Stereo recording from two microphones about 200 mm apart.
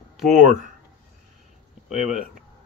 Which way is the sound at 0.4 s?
40° right (ahead or behind).